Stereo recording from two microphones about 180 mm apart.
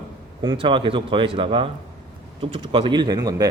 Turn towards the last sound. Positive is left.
turn(degrees=-20)  # may be behind; listen again after turning